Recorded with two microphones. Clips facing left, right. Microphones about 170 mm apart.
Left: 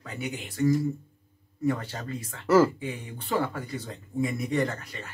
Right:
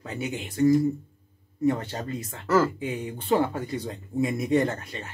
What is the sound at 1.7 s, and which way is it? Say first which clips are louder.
Speech: right 2 dB; 20° right (ahead or behind).